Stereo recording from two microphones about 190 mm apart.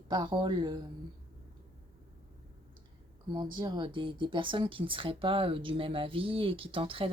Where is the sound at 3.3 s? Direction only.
25° right (ahead or behind).